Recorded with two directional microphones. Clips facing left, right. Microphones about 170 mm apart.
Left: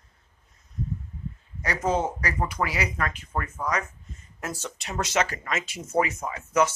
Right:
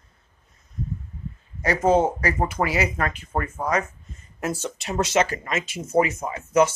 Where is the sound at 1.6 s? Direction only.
30° right (ahead or behind).